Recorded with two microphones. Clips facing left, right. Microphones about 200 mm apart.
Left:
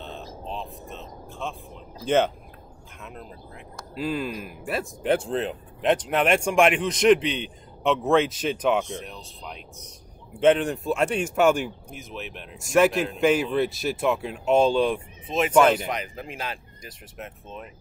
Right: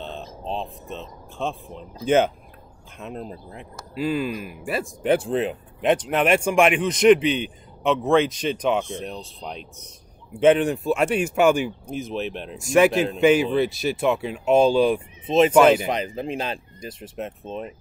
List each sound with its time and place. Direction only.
0.0 s a sound: 30° right (ahead or behind)
2.0 s speech: 5° right (ahead or behind)
3.0 s speech: 30° right (ahead or behind)
3.7 s speech: centre (ahead or behind)
9.0 s speech: 30° right (ahead or behind)
10.4 s speech: 5° right (ahead or behind)
11.9 s speech: 30° right (ahead or behind)
12.5 s speech: centre (ahead or behind)
15.2 s speech: 30° right (ahead or behind)
15.5 s speech: 5° right (ahead or behind)
15.9 s speech: 25° right (ahead or behind)